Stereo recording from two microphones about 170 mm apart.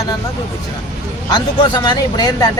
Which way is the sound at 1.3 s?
25° left (ahead or behind).